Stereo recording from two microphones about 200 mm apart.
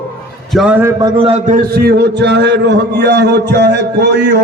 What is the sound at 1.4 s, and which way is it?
A man's voice, 45° right (ahead or behind).